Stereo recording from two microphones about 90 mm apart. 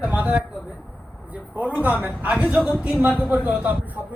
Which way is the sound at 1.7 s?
20° right (ahead or behind).